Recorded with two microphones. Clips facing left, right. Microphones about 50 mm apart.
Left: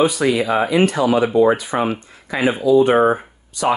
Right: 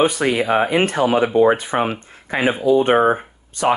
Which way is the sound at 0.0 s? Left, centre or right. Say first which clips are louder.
Left 1 dB; right.